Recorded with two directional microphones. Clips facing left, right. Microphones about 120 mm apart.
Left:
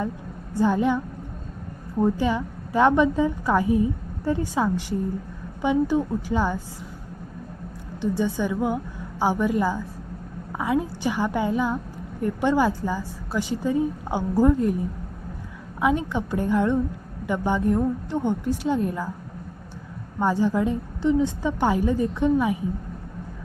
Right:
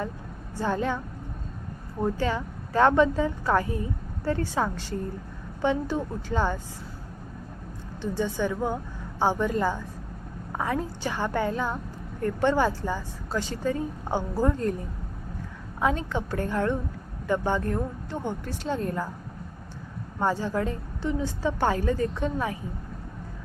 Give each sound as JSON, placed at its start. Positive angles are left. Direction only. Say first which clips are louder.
{"t": 0.5, "sound": "speech", "louder": "left 6 dB", "side_deg": 15}
{"t": 2.1, "sound": "speech", "louder": "left 4 dB", "side_deg": 15}
{"t": 5.6, "sound": "speech", "louder": "left 5 dB", "side_deg": 15}
{"t": 8.0, "sound": "a woman's voice", "louder": "left 3 dB", "side_deg": 15}
{"t": 15.8, "sound": "speech", "louder": "left 4 dB", "side_deg": 15}
{"t": 20.4, "sound": "speech", "louder": "left 6 dB", "side_deg": 15}